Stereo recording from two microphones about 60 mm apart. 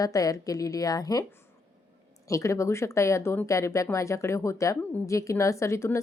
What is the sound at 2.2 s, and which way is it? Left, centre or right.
A woman's voice, left.